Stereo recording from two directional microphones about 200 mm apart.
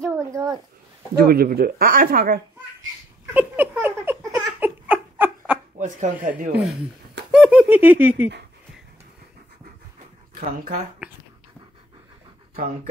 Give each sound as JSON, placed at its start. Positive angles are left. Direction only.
{"t": 0.0, "sound": "a sound", "side_deg": -15}
{"t": 1.1, "sound": "speech", "side_deg": -50}
{"t": 3.3, "sound": "a sound", "side_deg": -10}
{"t": 4.5, "sound": "giggle", "side_deg": -10}
{"t": 5.8, "sound": "speech", "side_deg": -40}
{"t": 6.5, "sound": "speech", "side_deg": 0}
{"t": 11.0, "sound": "speech", "side_deg": -5}